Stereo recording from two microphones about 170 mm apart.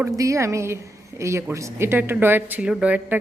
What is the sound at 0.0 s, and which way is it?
A woman's voice, 15° right (ahead or behind).